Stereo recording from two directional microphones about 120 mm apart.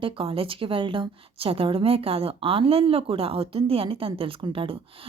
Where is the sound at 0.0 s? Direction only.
50° right (ahead or behind).